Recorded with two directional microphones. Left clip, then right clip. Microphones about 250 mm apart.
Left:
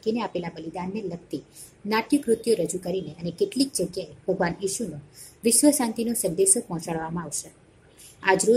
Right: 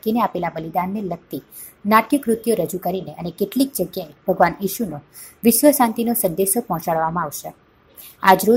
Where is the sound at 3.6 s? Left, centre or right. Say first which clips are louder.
Right 9 dB; right.